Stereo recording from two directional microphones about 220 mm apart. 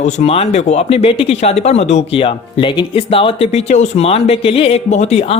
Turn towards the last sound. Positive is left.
turn(degrees=30)  # may be behind; listen again after turning